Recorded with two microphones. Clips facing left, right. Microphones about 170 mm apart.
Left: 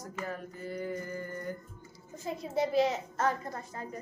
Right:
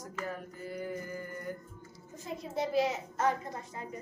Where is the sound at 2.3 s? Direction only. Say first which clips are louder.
Left 2 dB; centre (ahead or behind).